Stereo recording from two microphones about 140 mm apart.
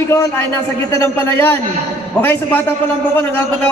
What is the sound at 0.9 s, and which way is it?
Speech, 20° left (ahead or behind).